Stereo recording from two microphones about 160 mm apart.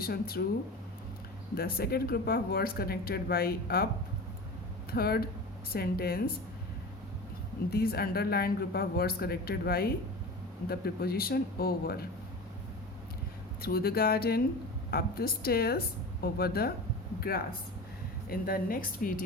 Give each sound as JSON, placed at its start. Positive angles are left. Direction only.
{"t": 0.0, "sound": "speech", "side_deg": 70}
{"t": 1.5, "sound": "speech", "side_deg": 75}
{"t": 4.9, "sound": "speech", "side_deg": 75}
{"t": 7.7, "sound": "speech", "side_deg": 75}
{"t": 13.6, "sound": "a woman's voice", "side_deg": 70}